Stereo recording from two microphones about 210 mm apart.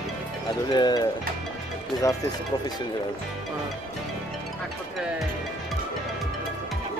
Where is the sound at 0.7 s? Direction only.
20° left (ahead or behind).